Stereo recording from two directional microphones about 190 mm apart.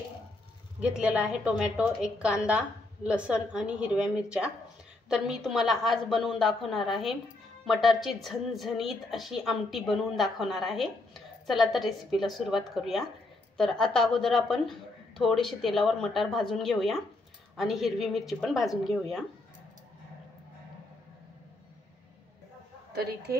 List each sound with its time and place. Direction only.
0.7 s a woman's voice: 5° right (ahead or behind)